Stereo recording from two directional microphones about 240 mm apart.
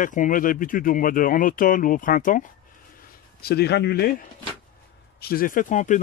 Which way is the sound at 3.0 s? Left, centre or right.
Left.